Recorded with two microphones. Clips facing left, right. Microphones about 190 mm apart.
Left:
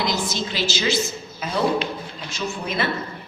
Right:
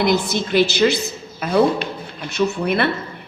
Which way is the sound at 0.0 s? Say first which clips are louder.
Right 6 dB; 60° right (ahead or behind).